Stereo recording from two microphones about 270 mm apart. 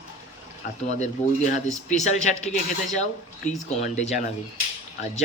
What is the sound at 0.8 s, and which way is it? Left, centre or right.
Speech, left.